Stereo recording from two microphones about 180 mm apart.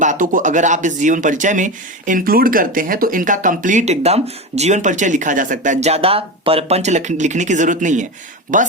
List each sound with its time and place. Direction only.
0.0 s speech: 45° right (ahead or behind)